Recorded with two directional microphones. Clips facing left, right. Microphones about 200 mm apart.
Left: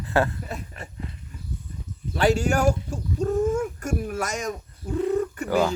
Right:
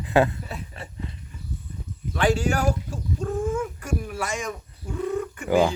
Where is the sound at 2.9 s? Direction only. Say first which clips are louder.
Left 4 dB; 40° left (ahead or behind).